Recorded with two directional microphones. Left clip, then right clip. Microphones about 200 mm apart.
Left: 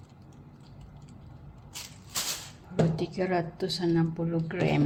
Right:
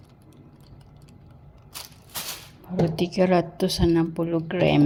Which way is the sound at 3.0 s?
40° right (ahead or behind).